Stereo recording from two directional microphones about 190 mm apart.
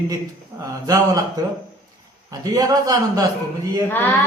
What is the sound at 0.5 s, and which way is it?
Speech, 20° right (ahead or behind).